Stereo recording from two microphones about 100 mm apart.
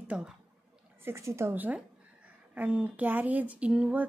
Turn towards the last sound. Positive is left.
turn(degrees=-10)  # may be behind; listen again after turning